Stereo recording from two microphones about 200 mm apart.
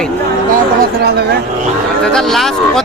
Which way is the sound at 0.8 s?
50° right (ahead or behind).